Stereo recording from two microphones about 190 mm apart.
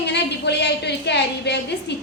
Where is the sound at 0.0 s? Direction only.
65° left (ahead or behind).